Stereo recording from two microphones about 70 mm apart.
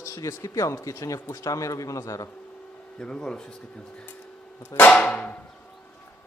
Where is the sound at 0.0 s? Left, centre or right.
Left.